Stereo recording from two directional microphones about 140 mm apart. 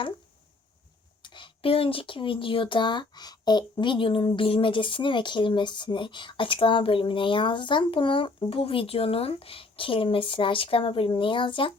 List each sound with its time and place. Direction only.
1.2 s speech: 35° left (ahead or behind)